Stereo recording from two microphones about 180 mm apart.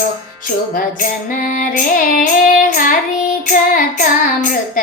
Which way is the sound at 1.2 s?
50° left (ahead or behind).